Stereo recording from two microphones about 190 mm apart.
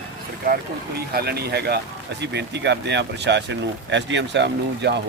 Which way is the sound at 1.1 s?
55° right (ahead or behind).